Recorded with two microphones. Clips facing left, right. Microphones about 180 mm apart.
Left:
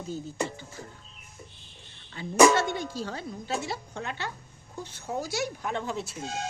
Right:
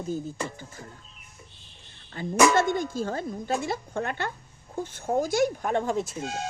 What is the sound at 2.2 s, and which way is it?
Speech, 50° right (ahead or behind).